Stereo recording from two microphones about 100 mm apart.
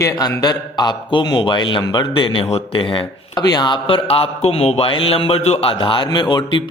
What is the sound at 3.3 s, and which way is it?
Speech, 40° left (ahead or behind).